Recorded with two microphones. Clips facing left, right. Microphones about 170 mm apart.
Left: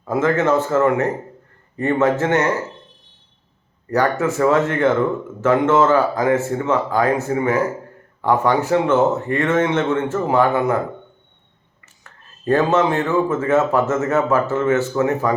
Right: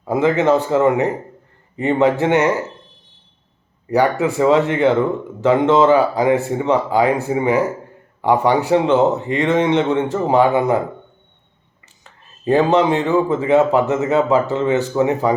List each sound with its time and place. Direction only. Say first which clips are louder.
0.0 s speech: right 2 dB; 15° right (ahead or behind)
3.8 s speech: right 2 dB; 15° right (ahead or behind)
12.0 s speech: right 1 dB; 15° right (ahead or behind)